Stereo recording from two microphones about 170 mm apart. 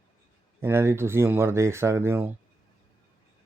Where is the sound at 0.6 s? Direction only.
15° right (ahead or behind).